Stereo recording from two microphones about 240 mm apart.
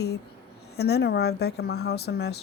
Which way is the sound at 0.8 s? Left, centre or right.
Left.